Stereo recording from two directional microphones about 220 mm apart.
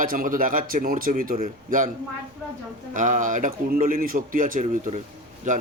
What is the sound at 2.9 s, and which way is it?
A man's voice, 35° right (ahead or behind).